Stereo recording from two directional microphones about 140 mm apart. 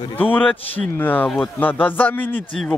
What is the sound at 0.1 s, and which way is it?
A man's voice, 15° left (ahead or behind).